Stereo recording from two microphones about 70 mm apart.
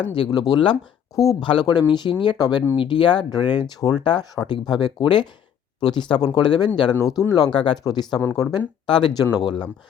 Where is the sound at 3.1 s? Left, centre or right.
Left.